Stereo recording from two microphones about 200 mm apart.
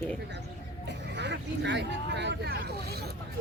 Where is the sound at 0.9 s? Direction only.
60° right (ahead or behind).